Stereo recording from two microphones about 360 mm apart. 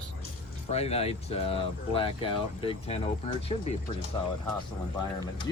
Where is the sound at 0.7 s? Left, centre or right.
Centre.